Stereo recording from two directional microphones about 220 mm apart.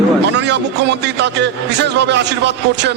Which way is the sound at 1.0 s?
50° right (ahead or behind).